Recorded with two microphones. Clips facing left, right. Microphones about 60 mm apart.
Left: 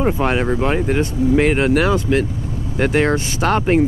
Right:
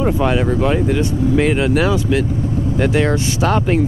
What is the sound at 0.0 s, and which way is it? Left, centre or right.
Speech, left.